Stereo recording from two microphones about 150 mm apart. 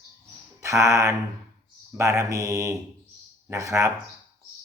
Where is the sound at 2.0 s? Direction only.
20° right (ahead or behind).